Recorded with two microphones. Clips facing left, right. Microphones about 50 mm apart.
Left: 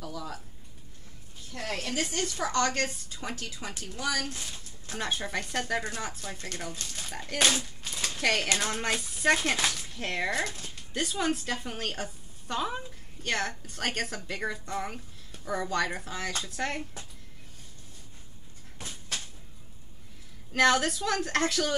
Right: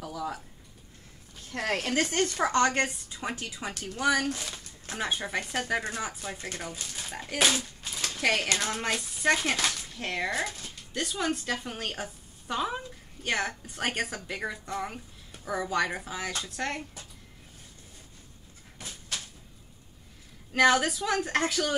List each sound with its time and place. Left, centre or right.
0.0 s a sound: centre
1.5 s speech: right
2.5 s a woman's voice: right
4.0 s speech: right
4.9 s a woman's voice: centre
20.5 s a woman's voice: centre